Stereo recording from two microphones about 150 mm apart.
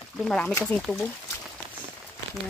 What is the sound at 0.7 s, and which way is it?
Speech, 40° right (ahead or behind).